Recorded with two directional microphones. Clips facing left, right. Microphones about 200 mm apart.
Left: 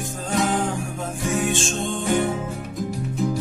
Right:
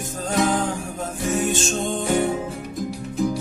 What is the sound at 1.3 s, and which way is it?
Music, 40° right (ahead or behind).